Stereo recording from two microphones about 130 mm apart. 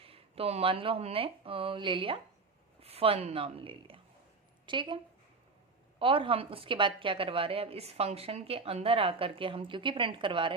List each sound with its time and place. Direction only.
0.0 s a woman's voice: 45° right (ahead or behind)
6.0 s a woman's voice: 40° right (ahead or behind)